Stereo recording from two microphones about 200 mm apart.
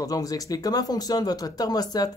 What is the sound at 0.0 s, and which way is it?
Speech, 20° left (ahead or behind).